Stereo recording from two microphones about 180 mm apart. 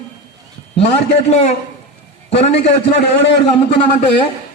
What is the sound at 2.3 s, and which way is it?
A man's voice, 35° left (ahead or behind).